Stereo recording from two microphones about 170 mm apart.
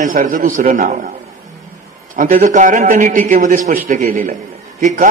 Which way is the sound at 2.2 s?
50° right (ahead or behind).